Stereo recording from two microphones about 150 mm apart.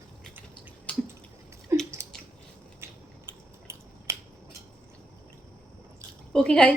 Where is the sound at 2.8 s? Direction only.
15° right (ahead or behind).